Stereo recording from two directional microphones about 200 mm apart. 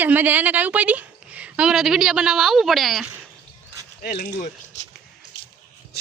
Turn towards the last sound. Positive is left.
turn(degrees=35)  # may be behind; listen again after turning